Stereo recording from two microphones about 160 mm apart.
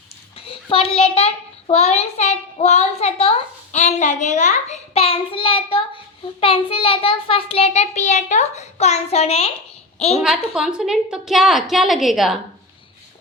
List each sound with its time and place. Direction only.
0.3 s a child's voice: 35° left (ahead or behind)
10.2 s a woman's voice: centre (ahead or behind)